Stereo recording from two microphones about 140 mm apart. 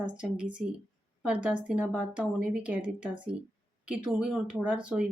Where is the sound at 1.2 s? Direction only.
5° right (ahead or behind).